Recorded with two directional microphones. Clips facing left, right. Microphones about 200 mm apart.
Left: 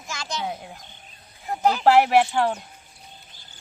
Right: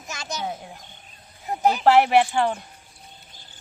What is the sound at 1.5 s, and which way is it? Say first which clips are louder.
Speech: even; 20° right (ahead or behind).